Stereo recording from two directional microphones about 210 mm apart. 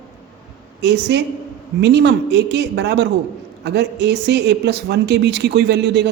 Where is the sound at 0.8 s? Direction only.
55° right (ahead or behind).